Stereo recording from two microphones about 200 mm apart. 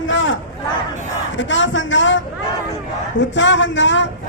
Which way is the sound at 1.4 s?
70° left (ahead or behind).